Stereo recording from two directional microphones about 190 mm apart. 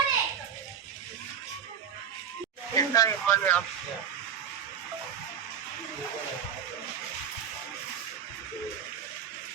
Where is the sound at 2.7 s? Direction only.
15° left (ahead or behind).